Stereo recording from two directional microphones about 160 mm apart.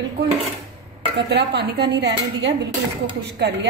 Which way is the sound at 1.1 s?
90° right.